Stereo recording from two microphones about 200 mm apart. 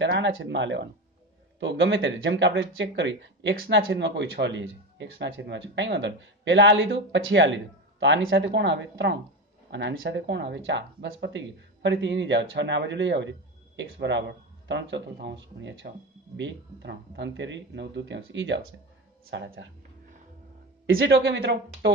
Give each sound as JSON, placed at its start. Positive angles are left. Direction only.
{"t": 0.0, "sound": "speech", "side_deg": -65}
{"t": 21.0, "sound": "speech", "side_deg": -65}